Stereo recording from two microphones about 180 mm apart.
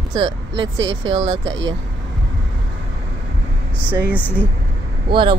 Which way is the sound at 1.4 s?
90° right.